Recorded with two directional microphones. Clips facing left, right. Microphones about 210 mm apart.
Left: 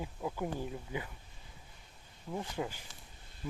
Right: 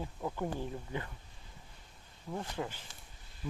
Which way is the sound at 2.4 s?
15° left (ahead or behind).